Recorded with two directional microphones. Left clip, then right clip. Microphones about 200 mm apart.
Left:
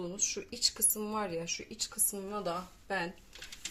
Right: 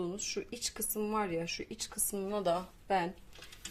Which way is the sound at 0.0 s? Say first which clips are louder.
Left 1 dB; 15° right (ahead or behind).